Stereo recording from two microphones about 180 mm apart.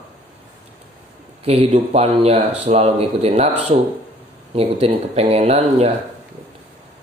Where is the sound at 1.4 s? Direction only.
35° right (ahead or behind).